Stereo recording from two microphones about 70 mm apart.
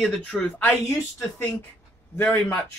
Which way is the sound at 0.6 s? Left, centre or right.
Left.